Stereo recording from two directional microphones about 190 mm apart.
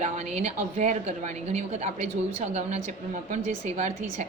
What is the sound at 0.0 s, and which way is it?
A woman's voice, 40° right (ahead or behind).